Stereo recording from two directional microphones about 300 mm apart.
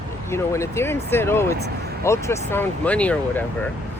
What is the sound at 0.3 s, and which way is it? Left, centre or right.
Speech, centre.